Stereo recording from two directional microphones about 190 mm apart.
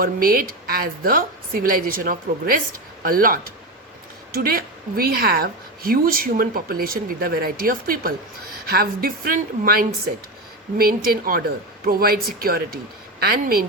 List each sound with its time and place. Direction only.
0.0 s a woman's voice: 50° right (ahead or behind)